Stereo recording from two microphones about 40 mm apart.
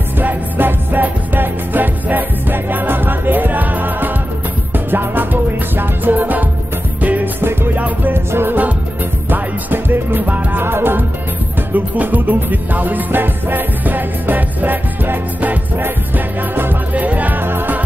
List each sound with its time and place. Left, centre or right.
0.2 s music: right
8.1 s music: right
9.3 s music: right
10.2 s music: right
10.6 s music: right
11.7 s music: right
16.9 s music: right
17.4 s music: right